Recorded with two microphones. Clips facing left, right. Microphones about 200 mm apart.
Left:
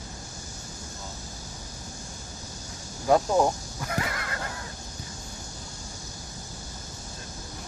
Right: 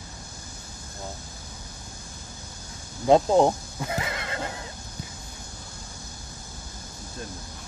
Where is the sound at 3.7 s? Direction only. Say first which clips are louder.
Right 1 dB; 20° right (ahead or behind).